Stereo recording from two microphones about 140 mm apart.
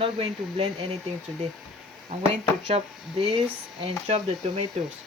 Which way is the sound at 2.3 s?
50° right (ahead or behind).